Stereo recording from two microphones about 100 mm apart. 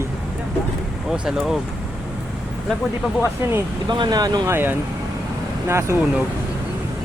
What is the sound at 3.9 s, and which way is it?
Speech, 50° right (ahead or behind).